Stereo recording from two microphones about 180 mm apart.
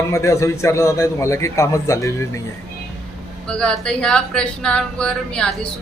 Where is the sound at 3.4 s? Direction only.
5° left (ahead or behind).